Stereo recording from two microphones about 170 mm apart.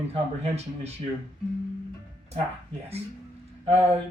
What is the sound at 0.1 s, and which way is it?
Speech, 35° right (ahead or behind).